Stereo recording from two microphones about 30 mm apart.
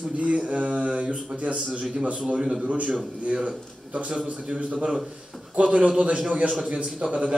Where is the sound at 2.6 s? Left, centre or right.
Right.